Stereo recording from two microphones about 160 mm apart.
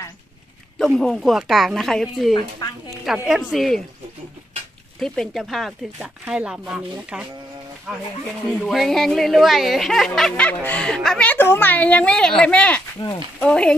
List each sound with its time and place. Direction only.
0.7 s speech: centre (ahead or behind)
5.0 s speech: 5° left (ahead or behind)